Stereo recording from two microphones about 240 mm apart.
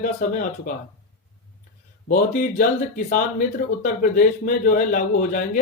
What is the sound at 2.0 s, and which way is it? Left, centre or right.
A man's voice, left.